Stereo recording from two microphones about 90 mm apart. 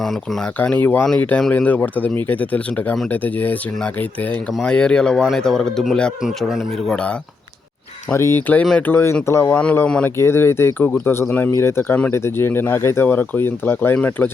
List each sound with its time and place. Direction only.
0.6 s speech: 15° left (ahead or behind)
4.6 s a man's voice: 10° left (ahead or behind)
8.1 s speech: 25° left (ahead or behind)
9.8 s speech: 10° left (ahead or behind)
10.2 s speech: 30° left (ahead or behind)